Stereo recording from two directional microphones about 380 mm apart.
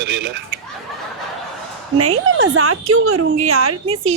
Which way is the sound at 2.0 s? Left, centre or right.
Right.